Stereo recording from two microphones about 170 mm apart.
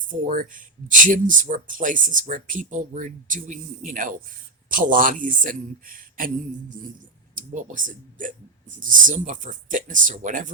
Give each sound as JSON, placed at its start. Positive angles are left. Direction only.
{"t": 0.1, "sound": "speech", "side_deg": -50}
{"t": 7.3, "sound": "speech", "side_deg": -50}